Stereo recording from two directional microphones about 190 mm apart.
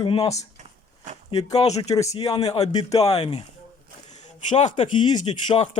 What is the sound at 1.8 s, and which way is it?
Speech, 20° left (ahead or behind).